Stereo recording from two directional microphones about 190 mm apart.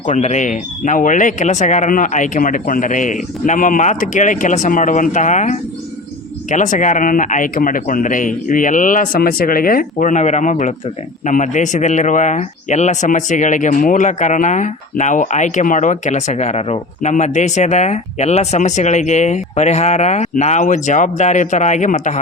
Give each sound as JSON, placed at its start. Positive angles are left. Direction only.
{"t": 0.0, "sound": "speech", "side_deg": 40}